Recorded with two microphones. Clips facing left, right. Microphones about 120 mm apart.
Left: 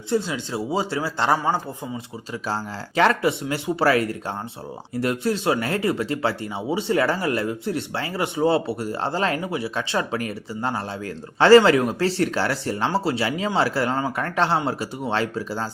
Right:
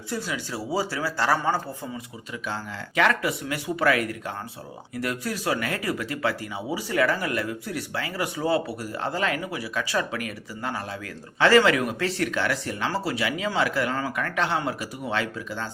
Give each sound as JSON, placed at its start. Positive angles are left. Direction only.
{"t": 0.1, "sound": "speech", "side_deg": 25}
{"t": 2.5, "sound": "speech", "side_deg": 30}